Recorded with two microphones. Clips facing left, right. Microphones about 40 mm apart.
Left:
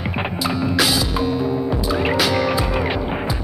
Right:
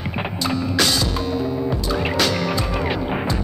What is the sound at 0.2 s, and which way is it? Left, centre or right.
Music, centre.